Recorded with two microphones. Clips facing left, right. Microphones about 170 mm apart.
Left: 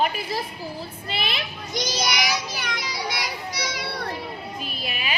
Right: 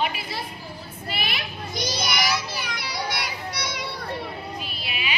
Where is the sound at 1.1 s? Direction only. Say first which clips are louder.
Left 1 dB; 25° left (ahead or behind).